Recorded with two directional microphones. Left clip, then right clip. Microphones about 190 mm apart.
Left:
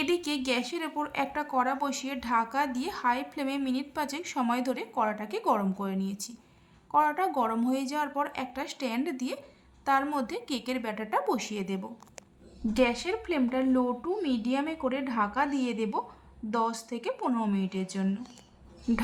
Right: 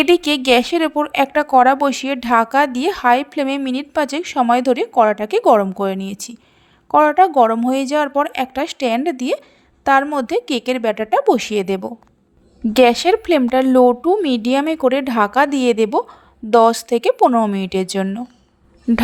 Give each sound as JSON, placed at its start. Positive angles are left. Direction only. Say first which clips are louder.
{"t": 0.0, "sound": "a woman's voice", "louder": "right 15 dB", "side_deg": -45}